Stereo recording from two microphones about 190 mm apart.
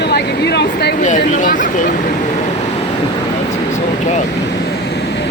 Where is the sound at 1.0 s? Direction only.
40° left (ahead or behind).